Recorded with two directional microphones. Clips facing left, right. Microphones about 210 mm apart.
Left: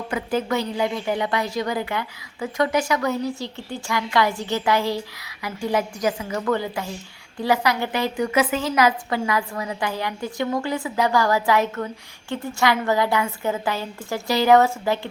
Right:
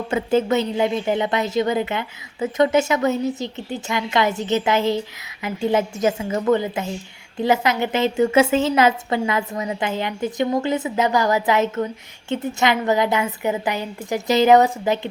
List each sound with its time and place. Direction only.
0.1 s a woman's voice: 25° right (ahead or behind)